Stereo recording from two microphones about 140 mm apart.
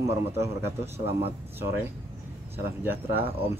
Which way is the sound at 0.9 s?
45° right (ahead or behind).